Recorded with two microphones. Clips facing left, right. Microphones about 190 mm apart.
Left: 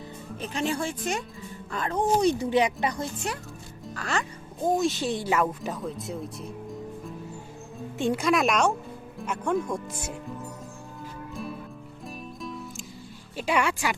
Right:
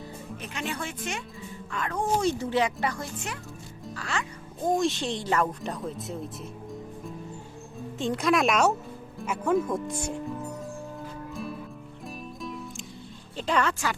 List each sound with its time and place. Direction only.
0.4 s speech: 35° left (ahead or behind)
2.0 s speech: 15° left (ahead or behind)
3.9 s speech: 45° left (ahead or behind)
4.7 s speech: centre (ahead or behind)
7.9 s speech: 10° left (ahead or behind)
8.2 s speech: centre (ahead or behind)
12.0 s music: centre (ahead or behind)
13.3 s a woman's voice: 10° left (ahead or behind)